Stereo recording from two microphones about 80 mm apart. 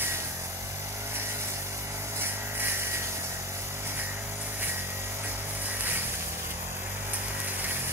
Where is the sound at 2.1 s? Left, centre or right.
Right.